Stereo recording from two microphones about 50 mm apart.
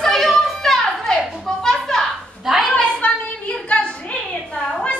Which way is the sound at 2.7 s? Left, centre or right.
Left.